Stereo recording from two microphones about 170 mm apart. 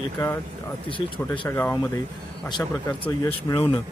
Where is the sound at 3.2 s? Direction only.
25° left (ahead or behind).